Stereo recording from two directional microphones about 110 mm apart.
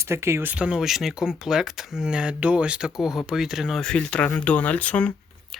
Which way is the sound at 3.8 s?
5° left (ahead or behind).